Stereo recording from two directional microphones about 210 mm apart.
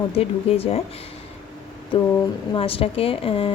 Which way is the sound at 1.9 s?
25° left (ahead or behind).